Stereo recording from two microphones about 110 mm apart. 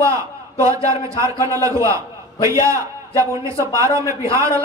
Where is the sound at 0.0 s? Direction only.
30° right (ahead or behind).